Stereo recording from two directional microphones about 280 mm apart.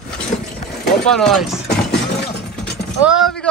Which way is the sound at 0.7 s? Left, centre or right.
Left.